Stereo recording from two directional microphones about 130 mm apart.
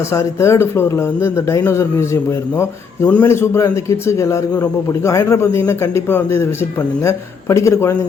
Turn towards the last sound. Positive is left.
turn(degrees=20)  # may be behind; listen again after turning